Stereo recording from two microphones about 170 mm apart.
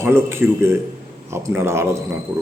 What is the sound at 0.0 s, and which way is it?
Speech, 15° right (ahead or behind).